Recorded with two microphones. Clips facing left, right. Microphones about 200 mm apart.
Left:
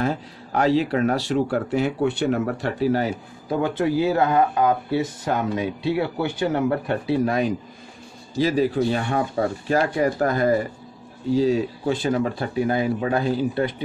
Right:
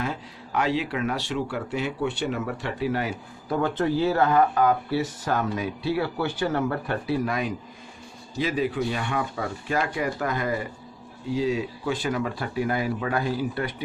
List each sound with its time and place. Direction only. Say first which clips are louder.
0.0 s speech: left 6 dB; 40° left (ahead or behind)
3.4 s speech: left 2 dB; 15° left (ahead or behind)
7.2 s speech: left 6 dB; 30° left (ahead or behind)